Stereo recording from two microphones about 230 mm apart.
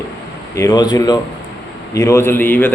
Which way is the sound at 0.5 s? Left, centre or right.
Centre.